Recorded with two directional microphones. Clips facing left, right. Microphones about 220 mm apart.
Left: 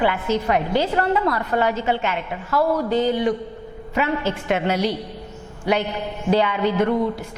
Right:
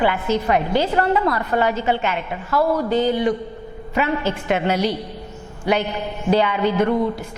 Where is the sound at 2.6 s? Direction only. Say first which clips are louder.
Right 1 dB; 30° right (ahead or behind).